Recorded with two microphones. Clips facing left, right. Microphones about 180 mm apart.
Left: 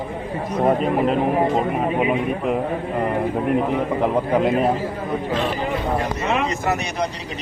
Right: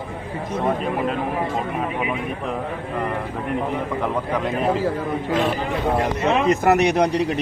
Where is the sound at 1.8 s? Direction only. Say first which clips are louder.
Left 5 dB; 30° left (ahead or behind).